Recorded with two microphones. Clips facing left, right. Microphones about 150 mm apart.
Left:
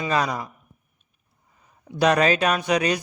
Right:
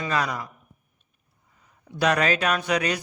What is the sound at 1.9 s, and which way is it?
A man's voice, 20° left (ahead or behind).